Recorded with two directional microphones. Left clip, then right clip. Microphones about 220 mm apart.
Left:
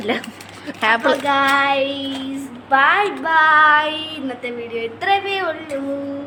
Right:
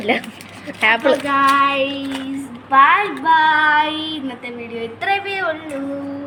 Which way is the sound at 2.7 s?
20° left (ahead or behind).